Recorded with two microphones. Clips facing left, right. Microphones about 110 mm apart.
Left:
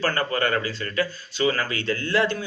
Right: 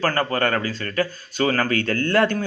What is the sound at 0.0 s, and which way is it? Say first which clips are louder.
Speech: right 3 dB; 40° right (ahead or behind).